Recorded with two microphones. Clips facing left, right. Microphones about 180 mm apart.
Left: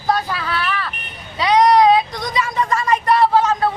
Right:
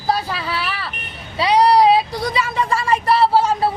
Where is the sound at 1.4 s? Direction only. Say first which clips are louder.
Left 1 dB; 30° right (ahead or behind).